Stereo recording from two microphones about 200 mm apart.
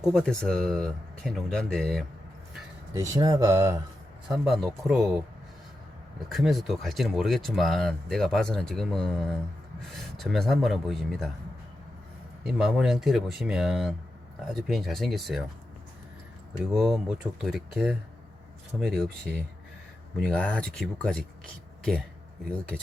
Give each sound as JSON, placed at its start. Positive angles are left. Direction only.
{"t": 0.0, "sound": "speech", "side_deg": 0}
{"t": 2.9, "sound": "speech", "side_deg": -15}
{"t": 4.3, "sound": "speech", "side_deg": 0}
{"t": 6.2, "sound": "speech", "side_deg": 0}
{"t": 12.4, "sound": "speech", "side_deg": 0}
{"t": 16.7, "sound": "speech", "side_deg": 0}